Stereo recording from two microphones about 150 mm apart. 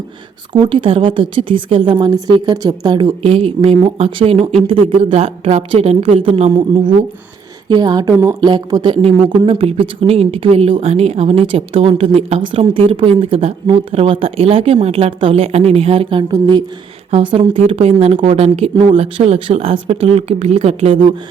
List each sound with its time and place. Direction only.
0.5 s a woman's voice: 35° right (ahead or behind)